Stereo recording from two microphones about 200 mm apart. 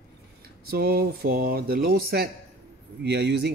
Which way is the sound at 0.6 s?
50° right (ahead or behind).